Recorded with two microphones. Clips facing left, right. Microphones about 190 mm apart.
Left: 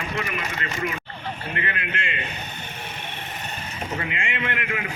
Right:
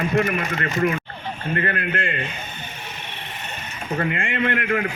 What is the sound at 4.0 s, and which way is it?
Speech, 50° right (ahead or behind).